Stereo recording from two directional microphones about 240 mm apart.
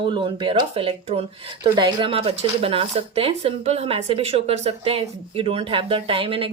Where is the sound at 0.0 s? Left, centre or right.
Right.